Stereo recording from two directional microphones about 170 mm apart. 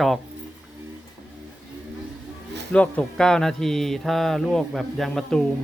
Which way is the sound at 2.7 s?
5° left (ahead or behind).